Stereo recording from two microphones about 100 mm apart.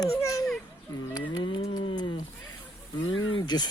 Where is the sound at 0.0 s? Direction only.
35° left (ahead or behind).